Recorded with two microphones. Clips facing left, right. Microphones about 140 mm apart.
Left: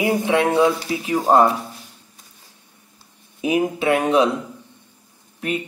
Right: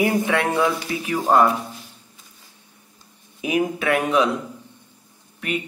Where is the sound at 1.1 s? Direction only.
35° left (ahead or behind).